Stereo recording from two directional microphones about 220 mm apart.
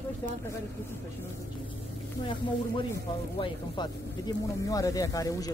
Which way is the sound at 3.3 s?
20° left (ahead or behind).